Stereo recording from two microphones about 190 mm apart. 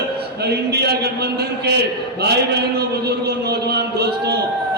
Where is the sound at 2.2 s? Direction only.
60° right (ahead or behind).